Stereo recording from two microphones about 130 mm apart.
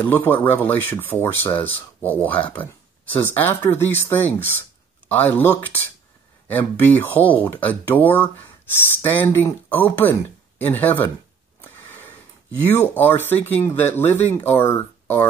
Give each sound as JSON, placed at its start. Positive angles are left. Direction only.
{"t": 0.0, "sound": "speech", "side_deg": 15}
{"t": 11.7, "sound": "wheeze", "side_deg": 15}
{"t": 12.5, "sound": "speech", "side_deg": 15}